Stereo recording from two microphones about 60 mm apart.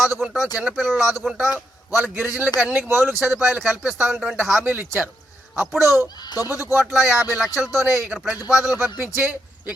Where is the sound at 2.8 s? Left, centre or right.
Right.